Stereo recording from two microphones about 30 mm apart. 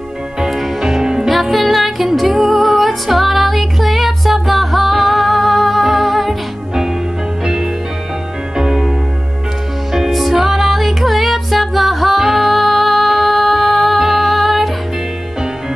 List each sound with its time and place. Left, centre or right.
0.4 s music: centre
1.3 s music: centre
8.5 s music: centre
9.9 s music: centre